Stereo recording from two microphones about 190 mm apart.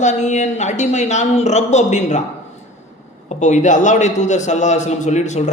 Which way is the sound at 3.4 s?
40° left (ahead or behind).